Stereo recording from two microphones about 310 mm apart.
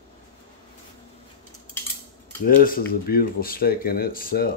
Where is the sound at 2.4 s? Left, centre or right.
Left.